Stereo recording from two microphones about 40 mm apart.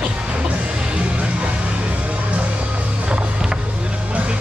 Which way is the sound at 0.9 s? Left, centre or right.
Right.